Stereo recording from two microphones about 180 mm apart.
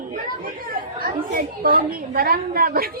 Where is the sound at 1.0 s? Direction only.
50° right (ahead or behind).